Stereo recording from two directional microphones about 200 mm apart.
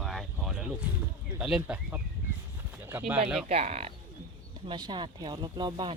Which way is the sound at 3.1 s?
5° right (ahead or behind).